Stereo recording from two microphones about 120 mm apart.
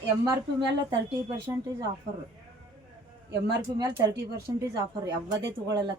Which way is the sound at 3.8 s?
30° right (ahead or behind).